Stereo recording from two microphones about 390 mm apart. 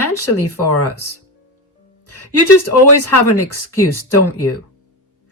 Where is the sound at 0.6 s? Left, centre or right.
Left.